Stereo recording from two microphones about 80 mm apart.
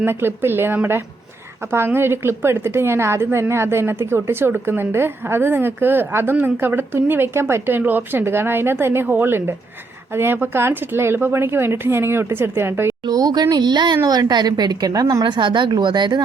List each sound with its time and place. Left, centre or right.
0.0 s a woman's voice: right
13.1 s speech: right